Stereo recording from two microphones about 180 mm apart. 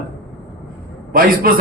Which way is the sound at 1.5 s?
55° right (ahead or behind).